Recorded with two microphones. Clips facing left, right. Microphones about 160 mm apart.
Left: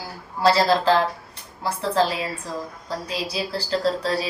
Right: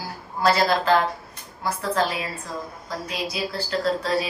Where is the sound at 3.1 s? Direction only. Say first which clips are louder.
Left 1 dB; 35° left (ahead or behind).